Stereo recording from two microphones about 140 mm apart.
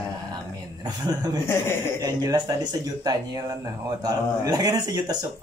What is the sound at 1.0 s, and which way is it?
A man's voice, 30° right (ahead or behind).